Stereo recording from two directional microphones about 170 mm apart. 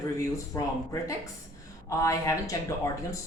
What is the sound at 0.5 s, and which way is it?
Speech, 20° left (ahead or behind).